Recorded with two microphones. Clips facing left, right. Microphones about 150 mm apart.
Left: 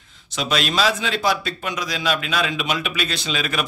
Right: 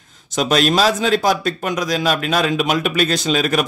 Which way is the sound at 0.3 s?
45° right (ahead or behind).